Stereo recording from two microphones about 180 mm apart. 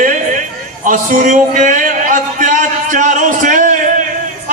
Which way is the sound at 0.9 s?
45° right (ahead or behind).